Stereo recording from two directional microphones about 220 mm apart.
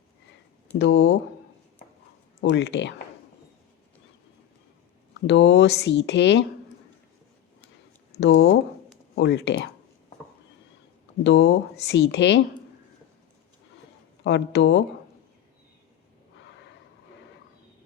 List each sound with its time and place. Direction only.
0.8 s speech: 50° left (ahead or behind)
2.4 s speech: 50° left (ahead or behind)
5.2 s speech: 50° left (ahead or behind)
8.2 s speech: 50° left (ahead or behind)
11.2 s speech: 50° left (ahead or behind)
14.3 s speech: 50° left (ahead or behind)